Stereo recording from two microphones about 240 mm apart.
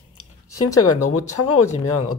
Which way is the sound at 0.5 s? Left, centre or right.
Left.